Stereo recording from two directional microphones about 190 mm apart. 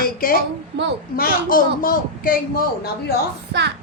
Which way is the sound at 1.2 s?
50° left (ahead or behind).